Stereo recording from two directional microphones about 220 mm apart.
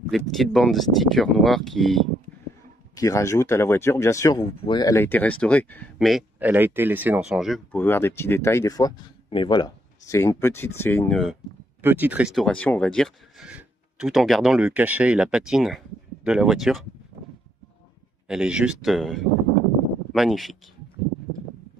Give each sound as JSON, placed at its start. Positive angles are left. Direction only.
{"t": 0.1, "sound": "speech", "side_deg": 0}
{"t": 2.9, "sound": "speech", "side_deg": 15}
{"t": 11.8, "sound": "speech", "side_deg": -10}
{"t": 18.3, "sound": "speech", "side_deg": -5}